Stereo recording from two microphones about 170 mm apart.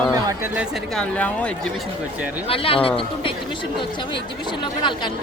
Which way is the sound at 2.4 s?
35° left (ahead or behind).